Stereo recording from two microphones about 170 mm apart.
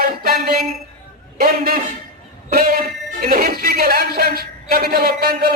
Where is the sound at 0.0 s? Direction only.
60° right (ahead or behind).